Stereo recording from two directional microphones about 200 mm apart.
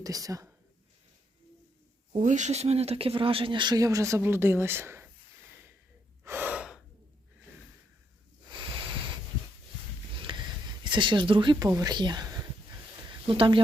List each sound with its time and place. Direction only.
0.0 s speech: 15° right (ahead or behind)
2.1 s speech: 40° right (ahead or behind); by 5.0 s 10° right (ahead or behind)
6.2 s gasp: 10° right (ahead or behind)
10.2 s sniff: 25° right (ahead or behind)
10.8 s speech: 25° right (ahead or behind)